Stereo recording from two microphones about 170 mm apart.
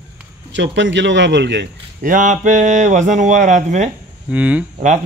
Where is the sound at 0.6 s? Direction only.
90° right.